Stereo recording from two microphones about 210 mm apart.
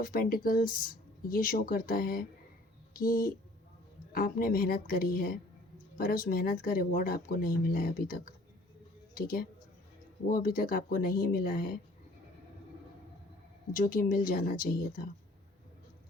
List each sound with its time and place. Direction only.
0.0 s speech: 45° left (ahead or behind)
13.7 s speech: 40° left (ahead or behind)